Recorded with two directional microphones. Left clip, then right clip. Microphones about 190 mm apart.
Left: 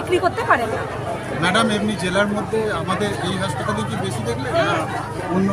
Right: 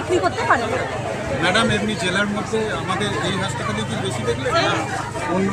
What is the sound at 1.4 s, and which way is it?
Speech, 65° left (ahead or behind).